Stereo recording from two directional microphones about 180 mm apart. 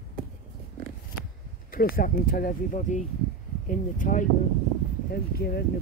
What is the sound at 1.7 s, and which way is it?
Speech, 55° left (ahead or behind).